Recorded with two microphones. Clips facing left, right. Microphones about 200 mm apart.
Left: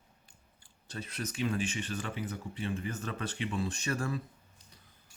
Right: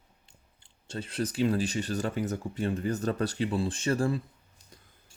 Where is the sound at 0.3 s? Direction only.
25° right (ahead or behind).